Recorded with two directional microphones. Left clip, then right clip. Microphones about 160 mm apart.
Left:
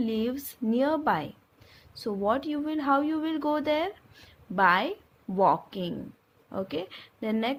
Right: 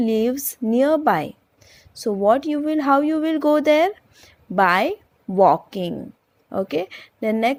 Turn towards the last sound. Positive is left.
turn(degrees=-40)  # may be behind; listen again after turning